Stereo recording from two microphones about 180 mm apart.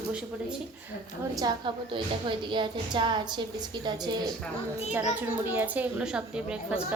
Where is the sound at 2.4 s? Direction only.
25° right (ahead or behind).